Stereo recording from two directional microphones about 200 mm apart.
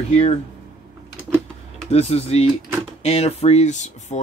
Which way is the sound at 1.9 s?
30° left (ahead or behind).